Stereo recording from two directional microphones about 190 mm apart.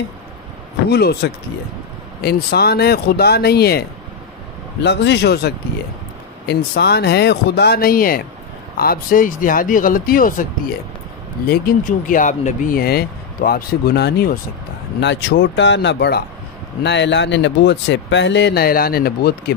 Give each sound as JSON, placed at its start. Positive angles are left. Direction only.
{"t": 0.8, "sound": "speech", "side_deg": 55}
{"t": 4.8, "sound": "speech", "side_deg": 65}
{"t": 11.4, "sound": "speech", "side_deg": 50}
{"t": 15.0, "sound": "speech", "side_deg": 70}